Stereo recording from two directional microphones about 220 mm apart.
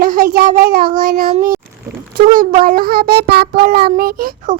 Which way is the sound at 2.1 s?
40° right (ahead or behind).